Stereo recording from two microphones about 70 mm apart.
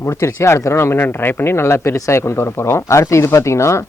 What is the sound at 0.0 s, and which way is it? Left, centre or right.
Speech, left.